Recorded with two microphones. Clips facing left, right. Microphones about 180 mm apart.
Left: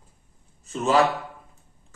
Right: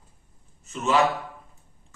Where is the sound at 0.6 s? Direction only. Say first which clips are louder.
Left 2 dB; 35° left (ahead or behind).